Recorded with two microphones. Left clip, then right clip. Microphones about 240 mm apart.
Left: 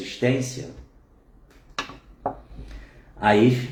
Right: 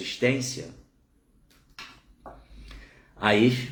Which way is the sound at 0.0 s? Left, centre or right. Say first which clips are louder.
Left 1 dB; centre.